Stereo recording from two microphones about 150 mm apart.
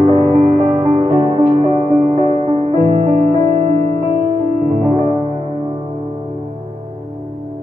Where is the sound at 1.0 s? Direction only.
40° right (ahead or behind).